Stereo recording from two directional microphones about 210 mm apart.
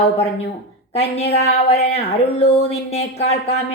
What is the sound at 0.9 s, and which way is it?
A woman's voice, 30° left (ahead or behind).